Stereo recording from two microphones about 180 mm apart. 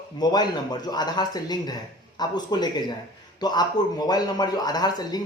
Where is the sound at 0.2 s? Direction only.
20° left (ahead or behind).